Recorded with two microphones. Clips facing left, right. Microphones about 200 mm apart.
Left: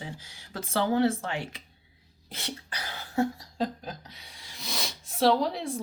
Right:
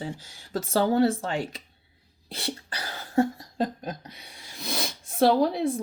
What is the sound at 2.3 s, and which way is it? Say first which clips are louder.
Cough: right 4 dB; 35° right (ahead or behind).